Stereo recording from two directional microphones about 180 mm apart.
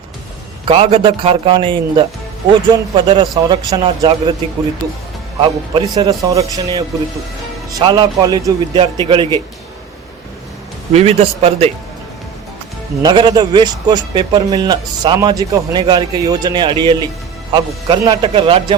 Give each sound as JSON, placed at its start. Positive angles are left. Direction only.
{"t": 0.6, "sound": "a man's voice", "side_deg": -30}
{"t": 5.4, "sound": "a man's voice", "side_deg": -25}
{"t": 10.9, "sound": "speech", "side_deg": -35}
{"t": 13.0, "sound": "a man's voice", "side_deg": -25}